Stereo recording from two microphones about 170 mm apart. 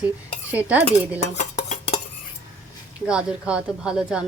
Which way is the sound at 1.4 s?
45° left (ahead or behind).